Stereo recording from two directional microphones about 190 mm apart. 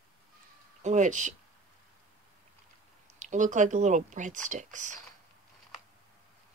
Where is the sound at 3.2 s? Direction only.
40° right (ahead or behind).